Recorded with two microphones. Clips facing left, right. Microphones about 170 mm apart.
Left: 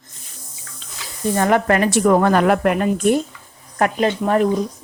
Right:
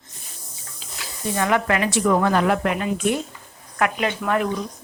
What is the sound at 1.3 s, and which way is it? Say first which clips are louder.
Speech: left 4 dB; 45° left (ahead or behind).